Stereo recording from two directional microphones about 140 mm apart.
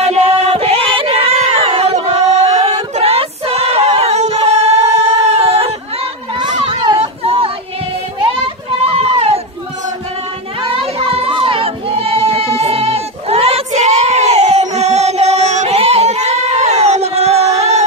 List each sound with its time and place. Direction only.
0.0 s a sound: 50° right (ahead or behind)
6.6 s children playing: 40° right (ahead or behind)
7.0 s a sound: 45° right (ahead or behind)
8.2 s children playing: 45° right (ahead or behind)
10.6 s child singing: 40° right (ahead or behind)
17.6 s music: 50° right (ahead or behind)